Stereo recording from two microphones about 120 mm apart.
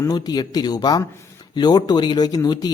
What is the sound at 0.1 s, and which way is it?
Speech, 35° left (ahead or behind).